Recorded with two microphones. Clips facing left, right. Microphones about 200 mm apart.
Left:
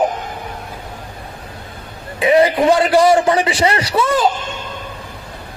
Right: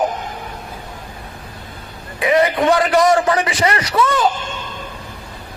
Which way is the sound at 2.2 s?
30° left (ahead or behind).